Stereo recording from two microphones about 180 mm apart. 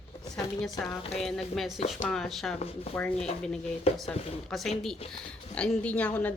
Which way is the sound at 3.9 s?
35° left (ahead or behind).